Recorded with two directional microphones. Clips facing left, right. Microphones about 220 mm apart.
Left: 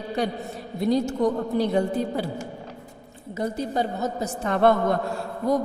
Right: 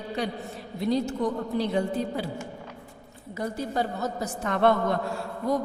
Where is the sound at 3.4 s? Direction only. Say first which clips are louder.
Left 3 dB; 20° left (ahead or behind); by 5.0 s 40° left (ahead or behind).